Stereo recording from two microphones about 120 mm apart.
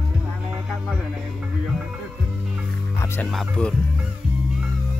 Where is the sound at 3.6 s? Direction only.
10° left (ahead or behind).